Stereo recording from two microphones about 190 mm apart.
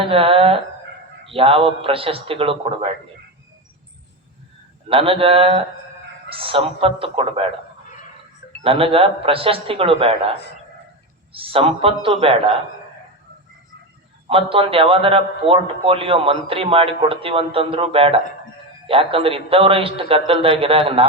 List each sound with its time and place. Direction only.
0.0 s a man's voice: 30° right (ahead or behind)
4.9 s a man's voice: 30° right (ahead or behind)
8.6 s a man's voice: 30° right (ahead or behind)
14.3 s a man's voice: 30° right (ahead or behind)